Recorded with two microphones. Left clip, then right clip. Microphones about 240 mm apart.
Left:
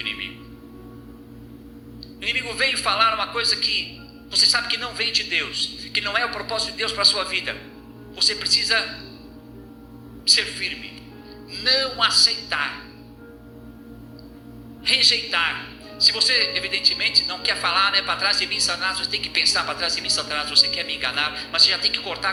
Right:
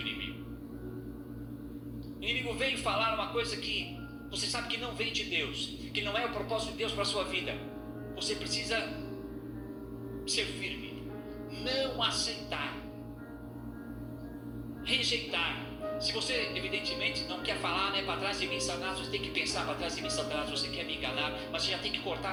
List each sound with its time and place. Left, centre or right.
2.2 s speech: left
10.2 s speech: left
14.8 s speech: left